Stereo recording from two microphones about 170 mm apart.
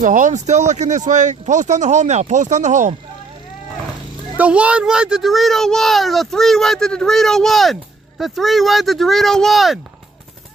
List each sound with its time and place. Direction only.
0.0 s speech: 45° right (ahead or behind)
4.4 s a child's voice: 5° right (ahead or behind)